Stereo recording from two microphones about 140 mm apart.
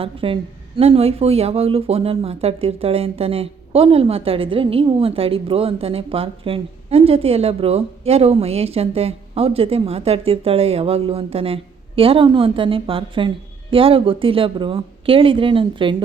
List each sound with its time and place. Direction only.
0.0 s a woman's voice: 40° right (ahead or behind)